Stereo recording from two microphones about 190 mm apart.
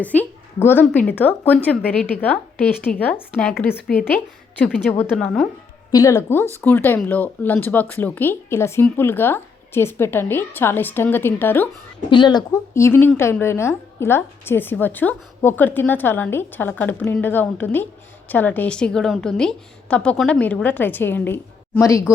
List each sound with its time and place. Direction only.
0.0 s a woman's voice: 10° left (ahead or behind)
5.9 s a woman's voice: 15° left (ahead or behind)
12.1 s a woman's voice: 25° left (ahead or behind)